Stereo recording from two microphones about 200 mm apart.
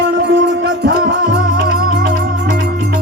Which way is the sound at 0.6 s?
60° right (ahead or behind).